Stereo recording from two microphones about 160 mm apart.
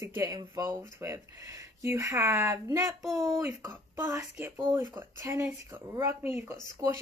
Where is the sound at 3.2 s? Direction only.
20° right (ahead or behind).